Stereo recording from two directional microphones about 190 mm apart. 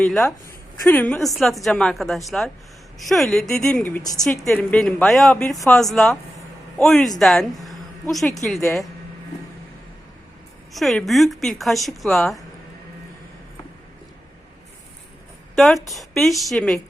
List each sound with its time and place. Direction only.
0.9 s speech: 10° left (ahead or behind)
4.2 s speech: centre (ahead or behind)
10.7 s speech: centre (ahead or behind)
15.5 s speech: centre (ahead or behind)